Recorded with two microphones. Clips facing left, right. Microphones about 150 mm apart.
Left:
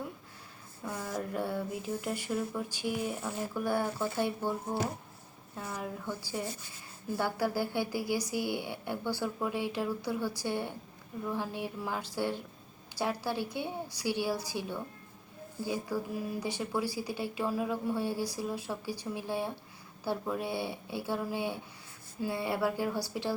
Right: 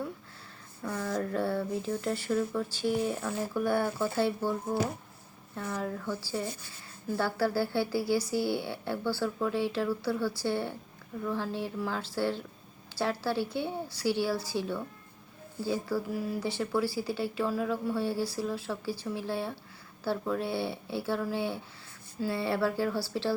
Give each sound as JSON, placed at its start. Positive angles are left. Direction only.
{"t": 0.8, "sound": "speech", "side_deg": 10}
{"t": 2.9, "sound": "speech", "side_deg": -30}
{"t": 3.2, "sound": "speech", "side_deg": 10}
{"t": 5.5, "sound": "speech", "side_deg": 15}